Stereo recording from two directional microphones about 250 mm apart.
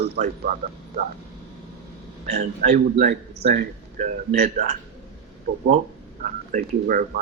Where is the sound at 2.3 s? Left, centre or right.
Right.